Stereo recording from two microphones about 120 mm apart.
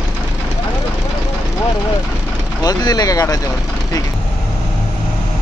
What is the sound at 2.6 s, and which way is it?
Speech, 30° left (ahead or behind).